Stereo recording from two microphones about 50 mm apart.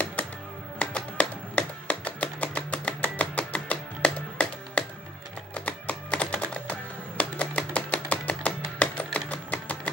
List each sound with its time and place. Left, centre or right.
0.0 s music: left